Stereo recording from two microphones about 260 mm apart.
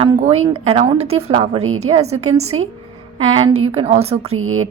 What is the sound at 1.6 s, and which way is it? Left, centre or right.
Speech, right.